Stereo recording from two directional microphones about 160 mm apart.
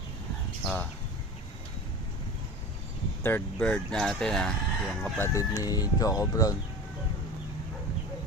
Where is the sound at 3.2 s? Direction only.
10° left (ahead or behind).